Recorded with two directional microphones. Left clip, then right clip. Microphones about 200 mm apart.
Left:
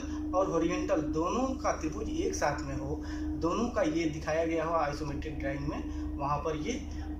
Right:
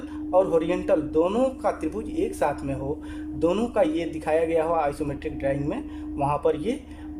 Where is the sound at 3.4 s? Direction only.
50° right (ahead or behind).